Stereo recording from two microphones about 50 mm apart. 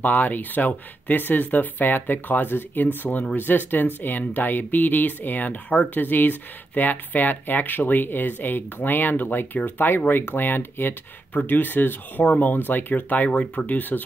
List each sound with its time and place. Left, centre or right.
0.0 s speech: left
13.3 s speech: centre
13.7 s speech: left